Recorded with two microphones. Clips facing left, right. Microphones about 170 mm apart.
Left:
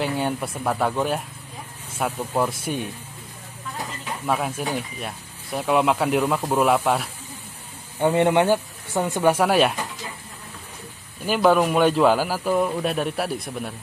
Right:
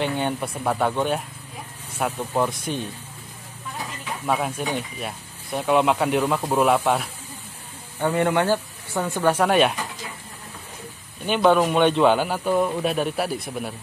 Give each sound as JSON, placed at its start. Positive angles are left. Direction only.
{"t": 0.0, "sound": "a man's voice", "side_deg": 5}
{"t": 4.3, "sound": "a man's voice", "side_deg": 0}
{"t": 8.0, "sound": "speech", "side_deg": 20}
{"t": 11.2, "sound": "a man's voice", "side_deg": 5}